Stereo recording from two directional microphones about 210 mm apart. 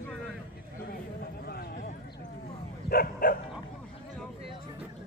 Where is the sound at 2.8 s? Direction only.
45° left (ahead or behind).